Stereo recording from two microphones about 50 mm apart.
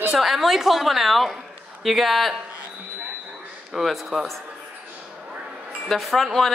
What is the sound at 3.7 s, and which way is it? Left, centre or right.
Speech, centre.